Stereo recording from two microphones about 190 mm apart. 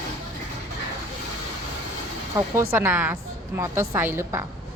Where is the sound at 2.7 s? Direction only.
10° right (ahead or behind).